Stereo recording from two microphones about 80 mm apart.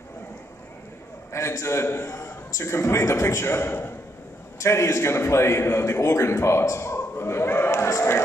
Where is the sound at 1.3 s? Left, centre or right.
Left.